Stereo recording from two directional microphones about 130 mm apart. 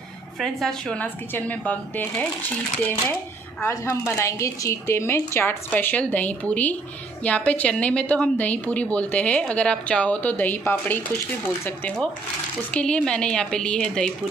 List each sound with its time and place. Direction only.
0.4 s a woman's voice: 5° left (ahead or behind)
3.6 s a woman's voice: 25° left (ahead or behind); by 14.1 s 5° left (ahead or behind)